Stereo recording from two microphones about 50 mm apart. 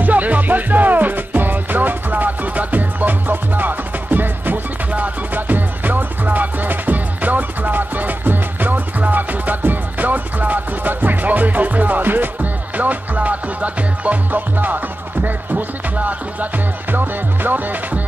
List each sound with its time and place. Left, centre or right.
0.0 s music: right